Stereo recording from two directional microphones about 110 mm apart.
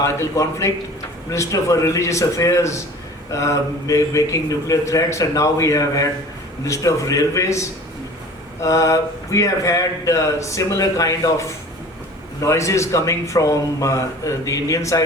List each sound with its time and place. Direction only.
0.0 s a man's voice: 25° left (ahead or behind)